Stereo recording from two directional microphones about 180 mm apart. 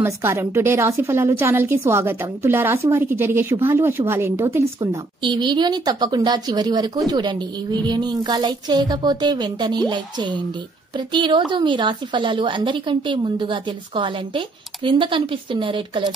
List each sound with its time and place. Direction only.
0.0 s a woman's voice: 15° right (ahead or behind)
5.2 s a woman's voice: 25° right (ahead or behind)